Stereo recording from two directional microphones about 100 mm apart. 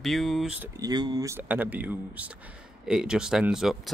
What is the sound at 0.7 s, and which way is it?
Speech, 40° right (ahead or behind).